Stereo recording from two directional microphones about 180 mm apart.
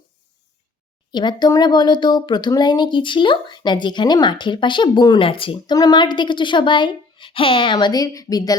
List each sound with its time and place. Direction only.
1.1 s speech: 25° left (ahead or behind)